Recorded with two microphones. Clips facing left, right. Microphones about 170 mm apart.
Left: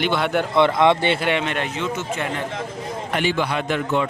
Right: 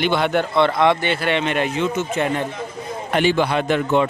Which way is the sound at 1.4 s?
10° right (ahead or behind).